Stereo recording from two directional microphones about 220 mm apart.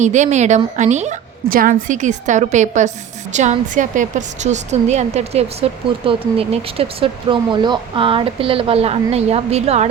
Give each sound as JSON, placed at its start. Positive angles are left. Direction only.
{"t": 0.0, "sound": "a woman's voice", "side_deg": -35}